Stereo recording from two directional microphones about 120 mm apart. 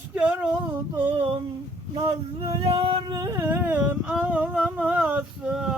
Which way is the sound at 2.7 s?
50° right (ahead or behind).